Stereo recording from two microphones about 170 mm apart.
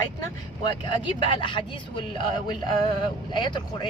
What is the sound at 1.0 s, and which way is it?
Speech, 30° left (ahead or behind).